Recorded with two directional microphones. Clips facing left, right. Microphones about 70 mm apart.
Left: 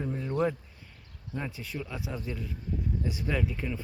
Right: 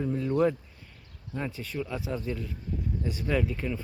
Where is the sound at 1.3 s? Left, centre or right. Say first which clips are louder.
Right 3 dB; centre.